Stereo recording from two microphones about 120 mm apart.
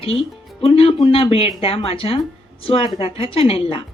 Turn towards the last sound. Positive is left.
turn(degrees=55)  # may be behind; listen again after turning